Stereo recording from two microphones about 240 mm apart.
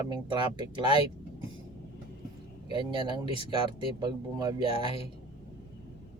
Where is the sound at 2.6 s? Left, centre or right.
Right.